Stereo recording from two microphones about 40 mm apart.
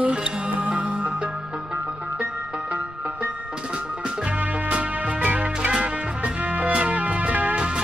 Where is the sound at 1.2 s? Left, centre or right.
Right.